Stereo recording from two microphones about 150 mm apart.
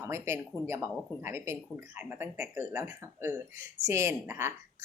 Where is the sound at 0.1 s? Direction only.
20° right (ahead or behind).